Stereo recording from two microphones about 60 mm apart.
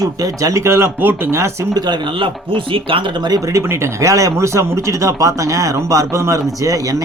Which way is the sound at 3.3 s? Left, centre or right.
Right.